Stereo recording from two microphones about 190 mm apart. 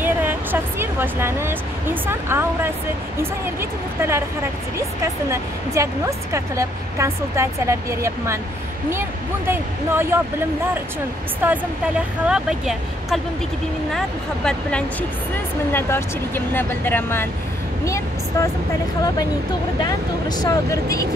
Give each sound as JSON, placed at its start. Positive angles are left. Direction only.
{"t": 0.0, "sound": "speech", "side_deg": -10}
{"t": 4.0, "sound": "speech", "side_deg": -15}
{"t": 9.5, "sound": "speech", "side_deg": -10}
{"t": 11.4, "sound": "speech", "side_deg": -10}
{"t": 19.8, "sound": "speech", "side_deg": 20}